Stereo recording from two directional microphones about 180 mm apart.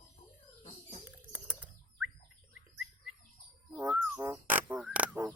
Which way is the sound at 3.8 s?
5° right (ahead or behind).